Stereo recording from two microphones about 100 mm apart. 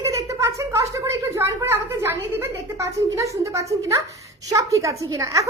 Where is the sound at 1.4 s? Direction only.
25° right (ahead or behind).